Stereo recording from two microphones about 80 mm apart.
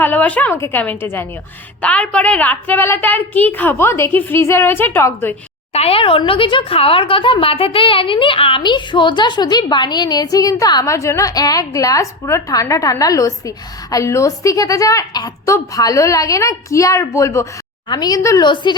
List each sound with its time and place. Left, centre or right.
0.0 s a woman's voice: left
1.8 s a woman's voice: centre
6.0 s a woman's voice: left
10.8 s a woman's voice: left
17.8 s a woman's voice: left
18.2 s speech: left
18.4 s a woman's voice: left